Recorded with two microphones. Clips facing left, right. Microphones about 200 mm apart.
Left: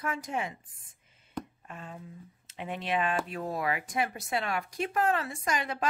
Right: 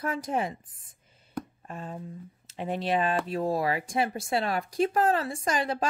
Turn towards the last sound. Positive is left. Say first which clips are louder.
# right 3 dB
turn(degrees=-30)  # may be behind; listen again after turning